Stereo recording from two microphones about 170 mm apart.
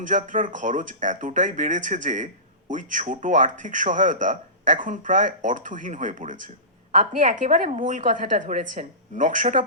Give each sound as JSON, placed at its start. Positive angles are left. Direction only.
{"t": 0.1, "sound": "speech", "side_deg": -50}